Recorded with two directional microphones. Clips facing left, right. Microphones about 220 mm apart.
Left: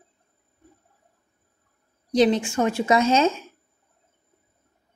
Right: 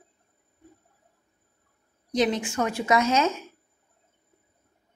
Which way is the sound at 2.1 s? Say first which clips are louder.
Left 5 dB; 30° left (ahead or behind).